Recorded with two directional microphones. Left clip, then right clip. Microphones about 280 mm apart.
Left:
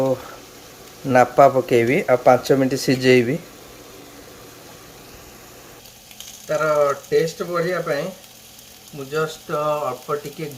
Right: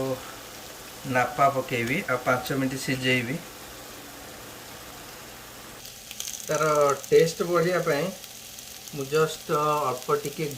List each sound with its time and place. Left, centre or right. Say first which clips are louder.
1.1 s speech: left 9 dB; centre
6.5 s speech: left 4 dB; centre
9.1 s speech: left 1 dB; centre